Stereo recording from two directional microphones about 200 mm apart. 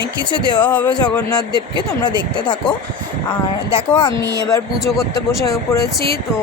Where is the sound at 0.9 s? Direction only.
20° left (ahead or behind).